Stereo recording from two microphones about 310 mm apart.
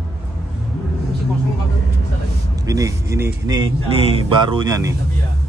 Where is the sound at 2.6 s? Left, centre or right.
Centre.